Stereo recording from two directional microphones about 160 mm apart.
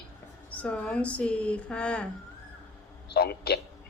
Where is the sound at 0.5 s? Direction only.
10° left (ahead or behind).